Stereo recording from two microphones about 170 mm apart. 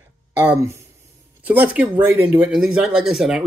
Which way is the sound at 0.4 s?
10° right (ahead or behind).